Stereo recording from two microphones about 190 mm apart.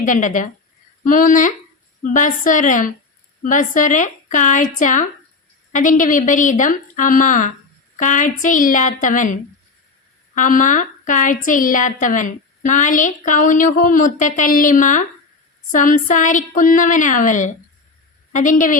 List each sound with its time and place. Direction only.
0.0 s a woman's voice: 40° left (ahead or behind)